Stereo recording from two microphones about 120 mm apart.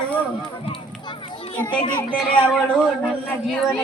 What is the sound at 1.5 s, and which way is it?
Speech, 10° left (ahead or behind).